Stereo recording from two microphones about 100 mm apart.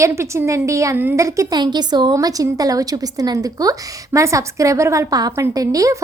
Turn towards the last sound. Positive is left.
turn(degrees=-35)  # may be behind; listen again after turning